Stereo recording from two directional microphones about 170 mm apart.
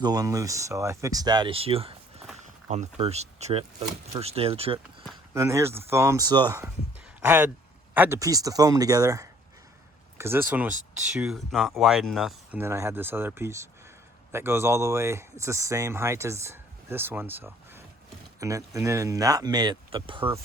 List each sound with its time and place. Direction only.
0.0 s speech: 20° right (ahead or behind)
5.3 s speech: 15° right (ahead or behind)
7.2 s speech: 10° right (ahead or behind)
11.2 s speech: centre (ahead or behind); by 20.2 s 30° right (ahead or behind)